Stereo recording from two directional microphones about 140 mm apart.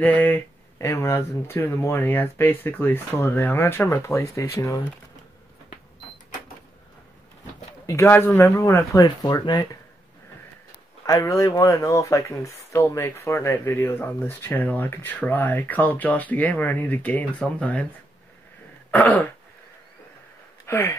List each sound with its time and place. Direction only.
0.0 s speech: 10° left (ahead or behind)
7.8 s speech: 20° left (ahead or behind)
11.1 s speech: 20° left (ahead or behind)
18.9 s throat clearing: 10° left (ahead or behind)
20.6 s speech: 15° left (ahead or behind)